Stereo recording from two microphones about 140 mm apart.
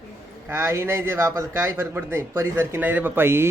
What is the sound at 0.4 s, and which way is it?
A man's voice, 20° right (ahead or behind).